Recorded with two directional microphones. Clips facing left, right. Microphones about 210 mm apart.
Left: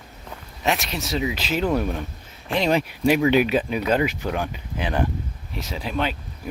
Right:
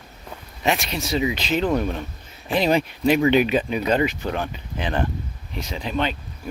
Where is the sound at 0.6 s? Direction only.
Centre (ahead or behind).